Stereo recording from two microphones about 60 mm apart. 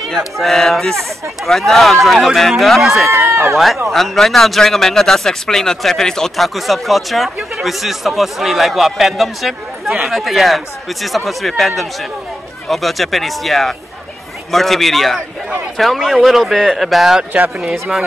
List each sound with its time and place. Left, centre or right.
0.2 s a man's voice: centre
3.1 s speech: right
3.5 s a man's voice: centre